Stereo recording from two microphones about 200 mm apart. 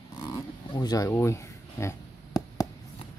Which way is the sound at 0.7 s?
20° left (ahead or behind).